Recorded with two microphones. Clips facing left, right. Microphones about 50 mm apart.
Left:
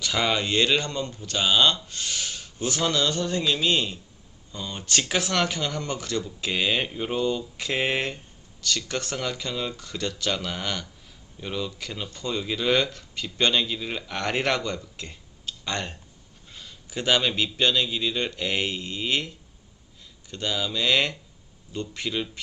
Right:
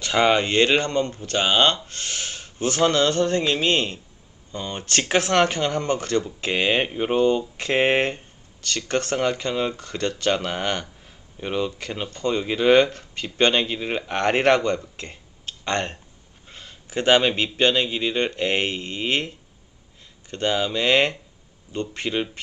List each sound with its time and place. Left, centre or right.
0.0 s speech: right